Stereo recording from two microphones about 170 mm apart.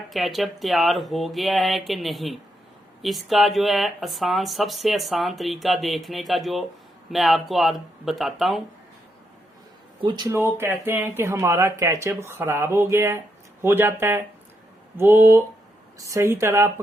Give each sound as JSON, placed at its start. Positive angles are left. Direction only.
{"t": 0.1, "sound": "speech", "side_deg": 0}
{"t": 10.0, "sound": "speech", "side_deg": -25}